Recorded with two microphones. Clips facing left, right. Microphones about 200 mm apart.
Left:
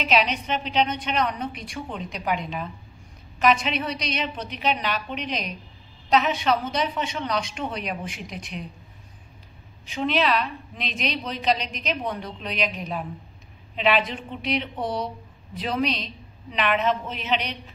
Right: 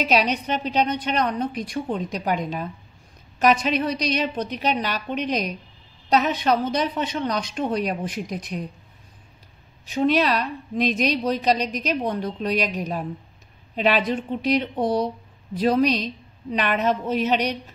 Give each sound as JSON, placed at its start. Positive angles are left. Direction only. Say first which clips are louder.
{"t": 0.0, "sound": "a woman's voice", "louder": "right 2 dB", "side_deg": -40}
{"t": 9.9, "sound": "a woman's voice", "louder": "right 3 dB", "side_deg": -40}